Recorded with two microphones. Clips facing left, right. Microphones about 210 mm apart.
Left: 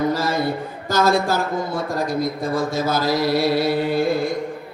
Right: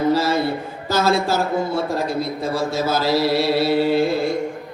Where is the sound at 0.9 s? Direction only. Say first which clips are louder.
Even; 45° left (ahead or behind).